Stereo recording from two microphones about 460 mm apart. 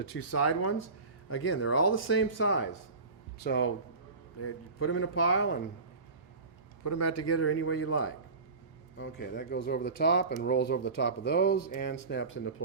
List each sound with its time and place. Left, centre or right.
0.0 s speech: left
6.8 s speech: left